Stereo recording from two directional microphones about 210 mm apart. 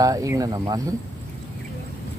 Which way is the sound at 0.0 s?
15° right (ahead or behind).